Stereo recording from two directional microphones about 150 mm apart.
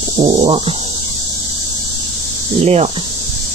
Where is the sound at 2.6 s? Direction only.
45° right (ahead or behind).